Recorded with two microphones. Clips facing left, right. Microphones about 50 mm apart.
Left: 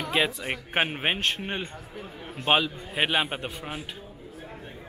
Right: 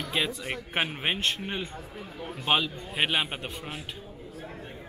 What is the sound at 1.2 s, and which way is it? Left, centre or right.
A man's voice, centre.